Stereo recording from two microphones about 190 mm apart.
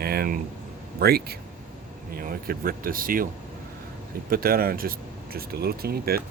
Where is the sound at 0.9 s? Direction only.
55° right (ahead or behind).